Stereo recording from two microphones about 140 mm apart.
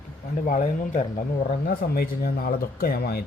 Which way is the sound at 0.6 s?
55° left (ahead or behind).